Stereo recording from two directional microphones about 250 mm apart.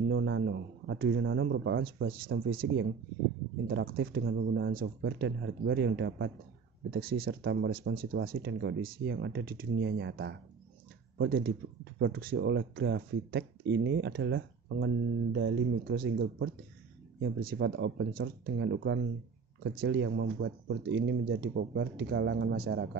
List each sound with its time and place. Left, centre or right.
0.1 s a man's voice: right